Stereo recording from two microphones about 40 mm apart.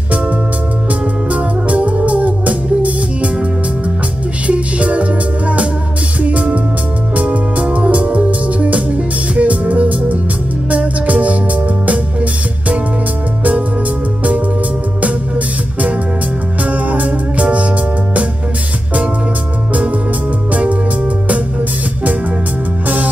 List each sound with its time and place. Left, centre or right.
1.3 s music: right
4.5 s music: right
15.0 s music: right